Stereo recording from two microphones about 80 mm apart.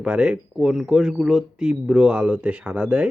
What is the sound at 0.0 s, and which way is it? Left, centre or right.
Speech, centre.